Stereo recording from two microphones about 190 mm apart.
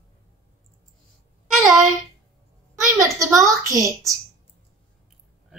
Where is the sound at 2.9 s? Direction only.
15° right (ahead or behind).